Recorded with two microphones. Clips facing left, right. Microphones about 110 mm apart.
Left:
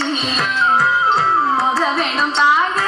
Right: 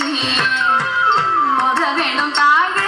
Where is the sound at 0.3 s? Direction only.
90° right.